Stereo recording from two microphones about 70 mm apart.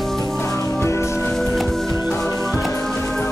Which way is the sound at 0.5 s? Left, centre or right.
Left.